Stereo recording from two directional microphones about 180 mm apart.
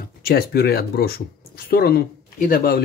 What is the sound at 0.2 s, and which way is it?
Speech, 60° left (ahead or behind).